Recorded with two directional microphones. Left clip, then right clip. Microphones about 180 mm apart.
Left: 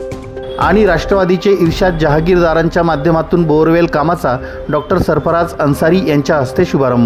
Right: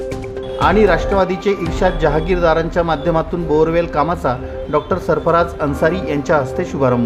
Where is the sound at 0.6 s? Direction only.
45° left (ahead or behind).